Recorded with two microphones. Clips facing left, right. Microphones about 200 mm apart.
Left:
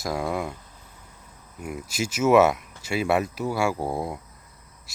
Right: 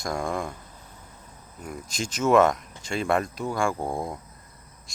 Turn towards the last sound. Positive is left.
turn(degrees=5)  # may be behind; listen again after turning